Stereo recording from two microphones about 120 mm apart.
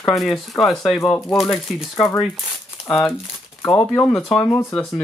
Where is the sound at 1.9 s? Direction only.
20° left (ahead or behind).